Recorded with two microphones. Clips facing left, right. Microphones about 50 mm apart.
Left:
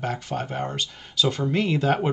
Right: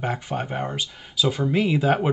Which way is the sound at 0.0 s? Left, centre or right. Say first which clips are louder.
Right 1 dB; centre.